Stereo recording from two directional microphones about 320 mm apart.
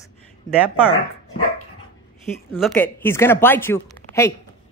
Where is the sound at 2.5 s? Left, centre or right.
Centre.